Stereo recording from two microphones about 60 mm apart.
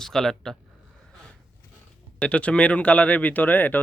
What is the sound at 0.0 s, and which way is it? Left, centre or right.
Speech, centre.